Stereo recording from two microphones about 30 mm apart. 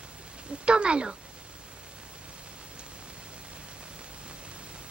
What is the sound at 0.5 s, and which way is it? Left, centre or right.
Speech, right.